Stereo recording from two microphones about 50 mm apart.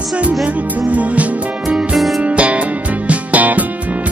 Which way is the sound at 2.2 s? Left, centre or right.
Right.